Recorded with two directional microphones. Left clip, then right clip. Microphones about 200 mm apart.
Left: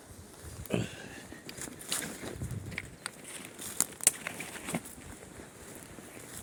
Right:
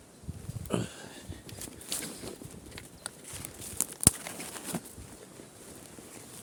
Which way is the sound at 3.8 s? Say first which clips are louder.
Left 2 dB; 15° left (ahead or behind).